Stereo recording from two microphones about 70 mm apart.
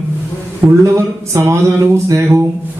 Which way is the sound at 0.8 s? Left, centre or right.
Right.